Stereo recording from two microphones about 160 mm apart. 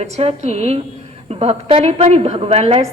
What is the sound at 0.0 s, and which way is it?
A woman's voice, 40° right (ahead or behind).